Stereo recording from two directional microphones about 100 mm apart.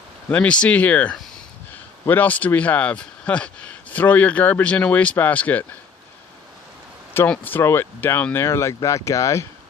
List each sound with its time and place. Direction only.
0.3 s speech: 10° left (ahead or behind)
7.3 s speech: 20° left (ahead or behind)